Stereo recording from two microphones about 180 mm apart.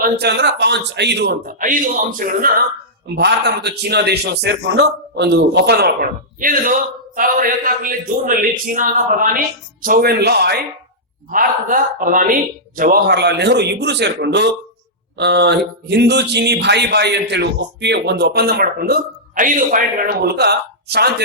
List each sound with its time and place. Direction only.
0.0 s a man's voice: 65° right (ahead or behind); by 2.5 s 50° right (ahead or behind)
3.2 s a man's voice: 70° right (ahead or behind)
11.3 s speech: 50° right (ahead or behind)